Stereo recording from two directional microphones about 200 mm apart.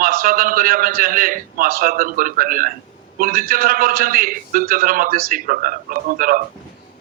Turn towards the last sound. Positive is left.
turn(degrees=-45)  # may be behind; listen again after turning